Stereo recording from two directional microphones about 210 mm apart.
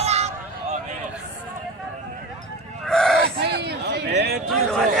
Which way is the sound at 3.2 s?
50° right (ahead or behind).